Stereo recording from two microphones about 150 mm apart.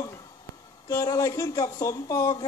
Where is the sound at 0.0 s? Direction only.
25° left (ahead or behind).